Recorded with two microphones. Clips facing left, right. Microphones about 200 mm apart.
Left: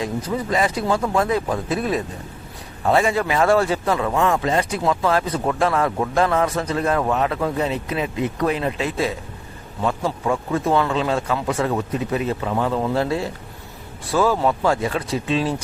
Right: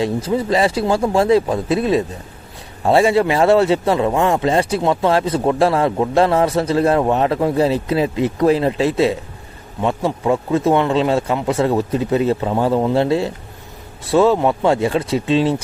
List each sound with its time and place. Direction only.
0.3 s a man's voice: 30° right (ahead or behind)